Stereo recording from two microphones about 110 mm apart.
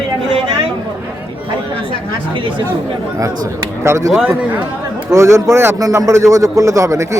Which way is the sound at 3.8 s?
30° right (ahead or behind).